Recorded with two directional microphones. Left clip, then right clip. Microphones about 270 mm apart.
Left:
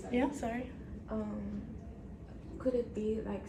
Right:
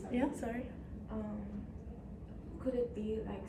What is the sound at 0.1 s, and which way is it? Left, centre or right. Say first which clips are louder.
Speech: left 3 dB; centre.